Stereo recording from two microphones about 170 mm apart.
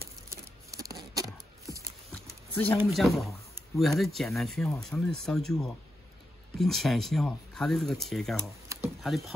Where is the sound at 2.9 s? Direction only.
Centre (ahead or behind).